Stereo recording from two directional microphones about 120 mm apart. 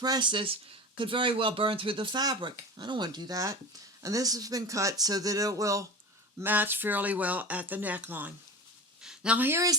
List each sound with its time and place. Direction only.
0.0 s speech: 40° right (ahead or behind)
6.4 s speech: 15° right (ahead or behind)
9.0 s a sound: 5° right (ahead or behind)